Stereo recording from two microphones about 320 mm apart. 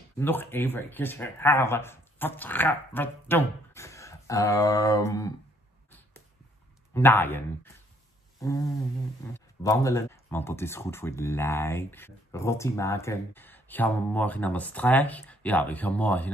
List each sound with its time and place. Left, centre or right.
0.2 s speech: centre
5.9 s arrow: centre
6.9 s speech: centre